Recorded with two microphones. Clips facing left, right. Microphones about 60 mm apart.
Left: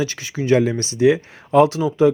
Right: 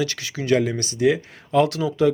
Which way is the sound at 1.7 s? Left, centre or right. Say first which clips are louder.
Left 3 dB; left.